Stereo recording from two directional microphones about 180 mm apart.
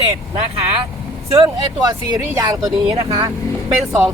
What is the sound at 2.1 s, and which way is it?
Speech, 20° right (ahead or behind).